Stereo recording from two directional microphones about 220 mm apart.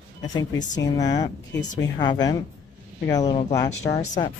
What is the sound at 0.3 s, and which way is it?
A woman's voice, 15° left (ahead or behind).